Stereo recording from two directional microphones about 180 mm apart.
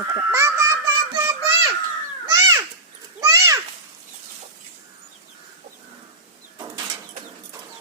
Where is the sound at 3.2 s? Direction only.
15° right (ahead or behind).